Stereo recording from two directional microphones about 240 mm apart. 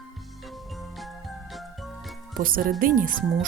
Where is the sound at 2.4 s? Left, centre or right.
Right.